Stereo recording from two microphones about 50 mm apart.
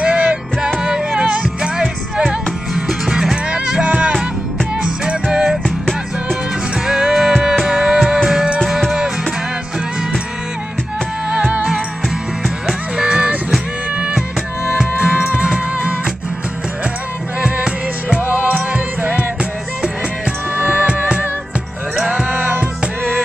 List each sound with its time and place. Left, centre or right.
0.0 s music: right
5.3 s music: centre
6.9 s music: centre
11.2 s music: right
12.9 s music: centre
18.3 s music: right
20.5 s music: right
21.9 s music: right